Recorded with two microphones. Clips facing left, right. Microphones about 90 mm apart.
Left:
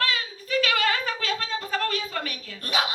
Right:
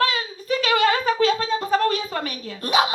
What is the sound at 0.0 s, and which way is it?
Speech, 25° right (ahead or behind).